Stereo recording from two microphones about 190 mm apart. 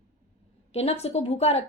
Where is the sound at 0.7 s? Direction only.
35° left (ahead or behind).